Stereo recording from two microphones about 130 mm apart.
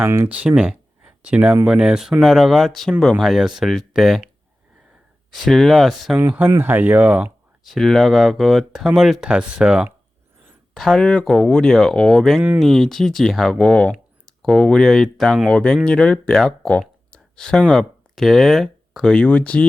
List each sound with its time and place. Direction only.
0.0 s speech: 20° right (ahead or behind)
0.3 s speech: 5° right (ahead or behind)
5.3 s speech: centre (ahead or behind)
6.1 s speech: 15° right (ahead or behind)
7.6 s speech: centre (ahead or behind)